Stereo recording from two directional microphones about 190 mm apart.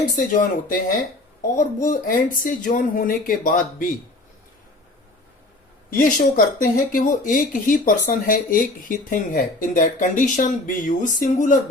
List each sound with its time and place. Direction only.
0.2 s speech: 45° left (ahead or behind)
6.0 s speech: 45° left (ahead or behind)